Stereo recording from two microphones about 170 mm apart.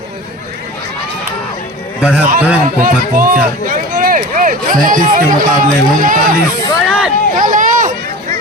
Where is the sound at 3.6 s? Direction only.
55° right (ahead or behind).